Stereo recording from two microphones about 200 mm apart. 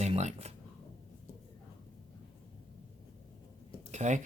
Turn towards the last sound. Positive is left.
turn(degrees=-35)  # may be behind; listen again after turning